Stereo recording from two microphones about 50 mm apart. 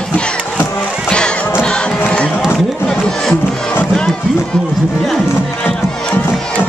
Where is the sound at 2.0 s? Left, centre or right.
Centre.